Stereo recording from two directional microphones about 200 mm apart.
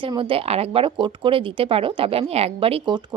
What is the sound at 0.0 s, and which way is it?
Speech, 25° right (ahead or behind).